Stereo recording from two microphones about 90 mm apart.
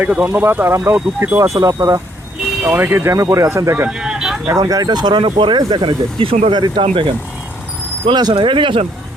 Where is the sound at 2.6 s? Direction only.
20° right (ahead or behind).